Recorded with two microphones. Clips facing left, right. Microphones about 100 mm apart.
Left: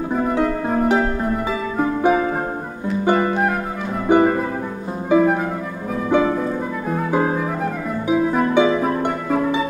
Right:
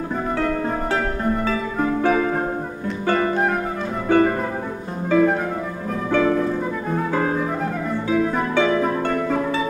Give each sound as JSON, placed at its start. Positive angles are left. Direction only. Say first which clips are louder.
{"t": 0.1, "sound": "harp", "louder": "left 3 dB", "side_deg": 10}
{"t": 1.5, "sound": "music", "louder": "left 1 dB", "side_deg": 15}
{"t": 6.0, "sound": "harp", "louder": "left 1 dB", "side_deg": 15}
{"t": 7.1, "sound": "music", "louder": "left 4 dB", "side_deg": 15}
{"t": 8.1, "sound": "harp", "louder": "left 3 dB", "side_deg": 15}
{"t": 8.5, "sound": "music", "louder": "even", "side_deg": 15}